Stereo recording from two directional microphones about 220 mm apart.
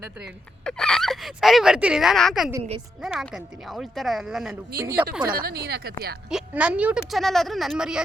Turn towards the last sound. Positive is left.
turn(degrees=-5)  # may be behind; listen again after turning